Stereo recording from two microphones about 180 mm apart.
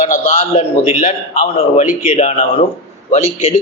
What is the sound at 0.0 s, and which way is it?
A man's voice, 45° left (ahead or behind).